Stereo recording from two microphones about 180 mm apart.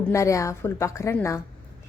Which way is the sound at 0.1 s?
15° left (ahead or behind).